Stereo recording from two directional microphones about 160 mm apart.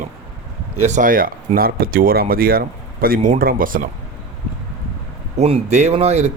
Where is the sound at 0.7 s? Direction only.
50° right (ahead or behind).